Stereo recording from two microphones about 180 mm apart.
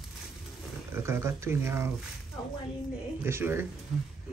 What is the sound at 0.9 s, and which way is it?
Speech, 15° right (ahead or behind).